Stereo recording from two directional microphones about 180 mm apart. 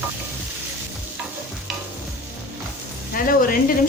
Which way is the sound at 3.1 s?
50° left (ahead or behind).